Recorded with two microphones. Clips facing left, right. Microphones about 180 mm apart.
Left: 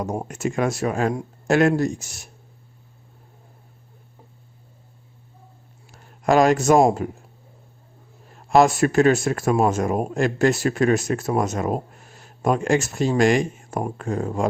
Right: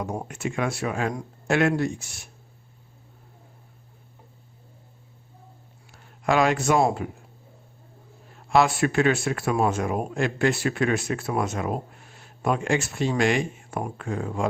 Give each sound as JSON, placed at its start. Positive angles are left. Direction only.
{"t": 0.3, "sound": "speech", "side_deg": 40}
{"t": 5.9, "sound": "a sound", "side_deg": 40}
{"t": 8.4, "sound": "a man's voice", "side_deg": 45}